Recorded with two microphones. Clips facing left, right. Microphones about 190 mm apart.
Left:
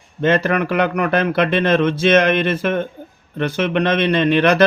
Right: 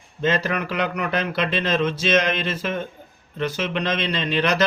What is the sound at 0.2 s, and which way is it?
Speech, 55° left (ahead or behind).